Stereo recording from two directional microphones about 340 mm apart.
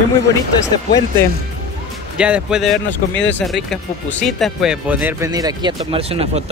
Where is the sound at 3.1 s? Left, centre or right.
Left.